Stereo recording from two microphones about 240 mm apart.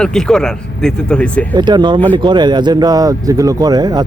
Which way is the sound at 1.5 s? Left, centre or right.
Centre.